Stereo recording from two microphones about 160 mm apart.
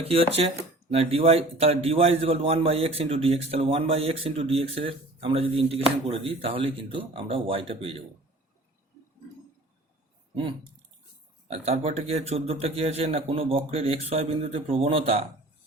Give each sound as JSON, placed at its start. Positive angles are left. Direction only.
{"t": 0.0, "sound": "a man's voice", "side_deg": -35}
{"t": 10.3, "sound": "a man's voice", "side_deg": -35}